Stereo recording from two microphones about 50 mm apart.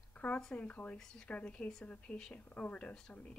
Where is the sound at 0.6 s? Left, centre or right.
Left.